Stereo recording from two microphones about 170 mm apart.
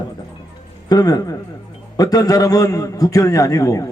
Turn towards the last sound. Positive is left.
turn(degrees=20)  # may be behind; listen again after turning